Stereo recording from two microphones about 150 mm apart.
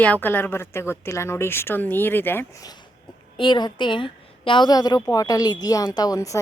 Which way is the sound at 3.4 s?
30° left (ahead or behind).